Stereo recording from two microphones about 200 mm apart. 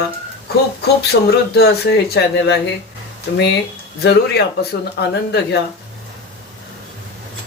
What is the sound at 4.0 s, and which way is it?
Speech, 55° left (ahead or behind).